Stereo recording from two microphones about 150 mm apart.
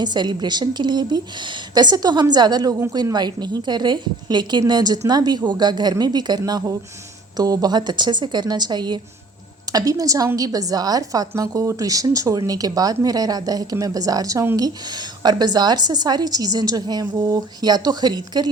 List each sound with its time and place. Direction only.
0.0 s a woman's voice: 30° right (ahead or behind)